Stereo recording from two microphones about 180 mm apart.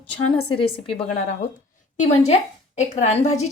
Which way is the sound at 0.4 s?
30° left (ahead or behind).